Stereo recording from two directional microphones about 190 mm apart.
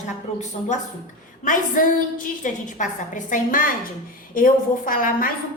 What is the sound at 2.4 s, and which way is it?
A woman's voice, 40° left (ahead or behind).